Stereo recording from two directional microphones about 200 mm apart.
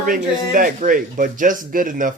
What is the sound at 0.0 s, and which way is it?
Speech, 45° right (ahead or behind).